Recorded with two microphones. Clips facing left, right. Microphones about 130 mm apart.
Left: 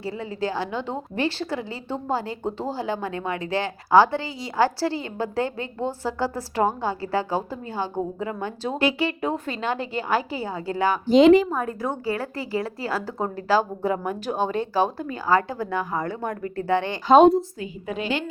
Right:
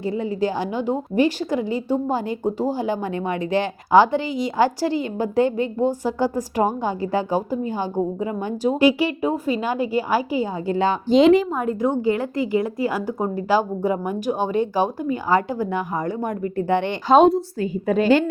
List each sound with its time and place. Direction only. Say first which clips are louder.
0.0 s a woman's voice: right 6 dB; 20° right (ahead or behind)
11.1 s a woman's voice: even; centre (ahead or behind)
11.5 s a woman's voice: right 6 dB; 20° right (ahead or behind)
17.1 s a woman's voice: even; centre (ahead or behind)
17.6 s a woman's voice: right 10 dB; 45° right (ahead or behind)